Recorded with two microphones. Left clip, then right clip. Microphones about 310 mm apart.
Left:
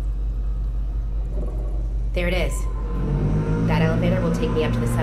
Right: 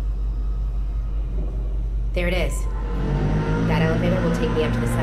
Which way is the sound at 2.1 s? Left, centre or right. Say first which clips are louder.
Even; centre.